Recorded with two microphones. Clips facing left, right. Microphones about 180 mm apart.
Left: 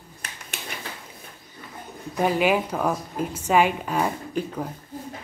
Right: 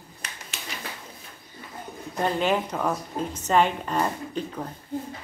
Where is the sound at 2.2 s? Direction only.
10° left (ahead or behind).